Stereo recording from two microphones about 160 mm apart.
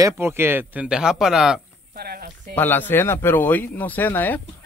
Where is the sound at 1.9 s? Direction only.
70° right (ahead or behind).